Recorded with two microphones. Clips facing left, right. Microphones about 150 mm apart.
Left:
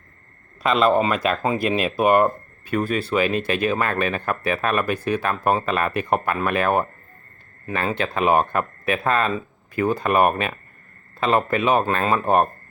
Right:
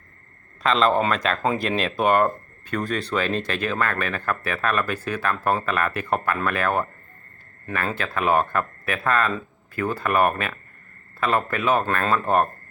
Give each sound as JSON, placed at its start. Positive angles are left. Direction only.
{"t": 0.6, "sound": "speech", "side_deg": 10}
{"t": 7.9, "sound": "speech", "side_deg": 20}